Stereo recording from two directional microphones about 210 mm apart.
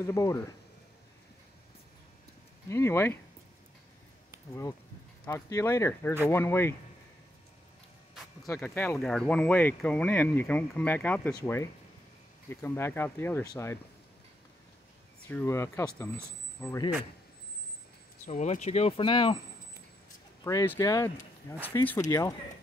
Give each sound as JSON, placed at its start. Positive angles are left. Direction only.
{"t": 0.0, "sound": "speech", "side_deg": 15}
{"t": 2.7, "sound": "speech", "side_deg": 10}
{"t": 5.2, "sound": "speech", "side_deg": 15}
{"t": 8.5, "sound": "speech", "side_deg": 10}
{"t": 15.2, "sound": "speech", "side_deg": 10}
{"t": 18.2, "sound": "speech", "side_deg": 35}
{"t": 20.4, "sound": "speech", "side_deg": 10}